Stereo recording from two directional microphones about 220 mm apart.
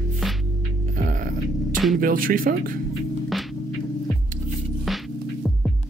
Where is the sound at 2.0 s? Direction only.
40° right (ahead or behind).